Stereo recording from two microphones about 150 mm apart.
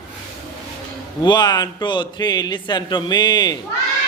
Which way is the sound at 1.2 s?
30° left (ahead or behind).